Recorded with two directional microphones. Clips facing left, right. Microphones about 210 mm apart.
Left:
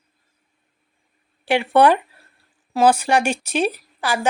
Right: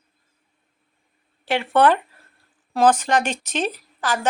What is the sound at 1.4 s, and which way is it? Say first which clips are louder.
Speech: left 2 dB; 15° left (ahead or behind).